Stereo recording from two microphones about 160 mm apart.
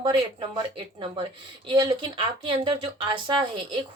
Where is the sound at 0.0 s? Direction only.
35° right (ahead or behind).